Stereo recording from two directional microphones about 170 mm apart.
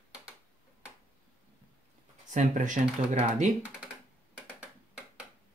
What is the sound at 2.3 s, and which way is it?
Speech, 45° right (ahead or behind).